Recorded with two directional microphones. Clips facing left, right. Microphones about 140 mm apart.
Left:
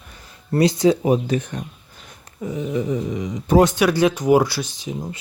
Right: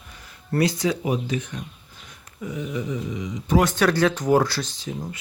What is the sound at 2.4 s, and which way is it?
Speech, 30° left (ahead or behind).